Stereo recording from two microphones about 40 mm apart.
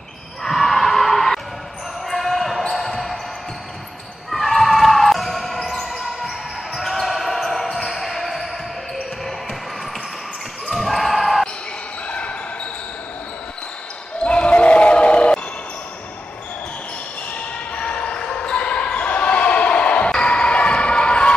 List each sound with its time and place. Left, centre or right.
0.4 s a sound: centre
2.0 s basketball bounce: centre
4.3 s basketball bounce: centre
10.7 s basketball bounce: centre
12.1 s basketball bounce: left
14.2 s basketball bounce: left
17.3 s basketball bounce: left